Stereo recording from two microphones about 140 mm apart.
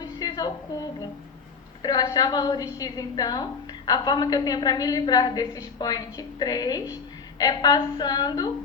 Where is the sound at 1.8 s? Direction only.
25° left (ahead or behind).